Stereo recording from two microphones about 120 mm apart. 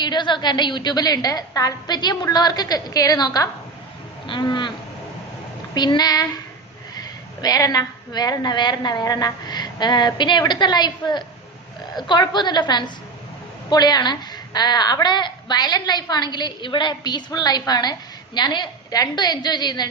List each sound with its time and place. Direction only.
0.0 s a woman's voice: 40° left (ahead or behind)
5.7 s a woman's voice: 35° left (ahead or behind)
7.4 s a woman's voice: 30° left (ahead or behind)